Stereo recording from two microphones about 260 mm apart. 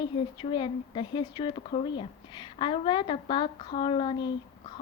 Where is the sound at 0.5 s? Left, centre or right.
Centre.